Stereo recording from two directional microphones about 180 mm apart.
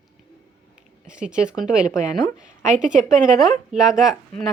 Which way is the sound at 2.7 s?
45° right (ahead or behind).